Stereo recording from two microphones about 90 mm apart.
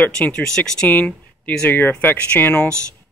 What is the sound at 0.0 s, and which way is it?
Speech, 15° left (ahead or behind).